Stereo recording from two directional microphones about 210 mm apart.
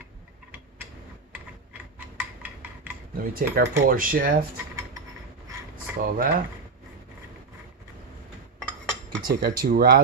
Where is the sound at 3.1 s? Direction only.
45° right (ahead or behind).